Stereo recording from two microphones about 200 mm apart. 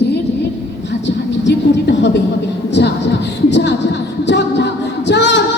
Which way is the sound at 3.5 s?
60° left (ahead or behind).